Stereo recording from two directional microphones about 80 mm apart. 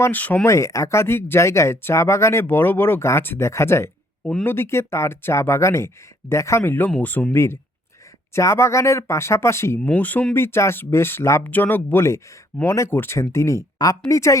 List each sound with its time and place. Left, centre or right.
0.1 s speech: left
0.4 s speech: left
4.2 s speech: centre
4.4 s speech: left
7.3 s speech: left
9.8 s speech: centre
10.3 s speech: left